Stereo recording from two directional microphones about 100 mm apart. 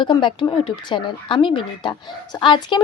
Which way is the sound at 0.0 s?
55° left (ahead or behind).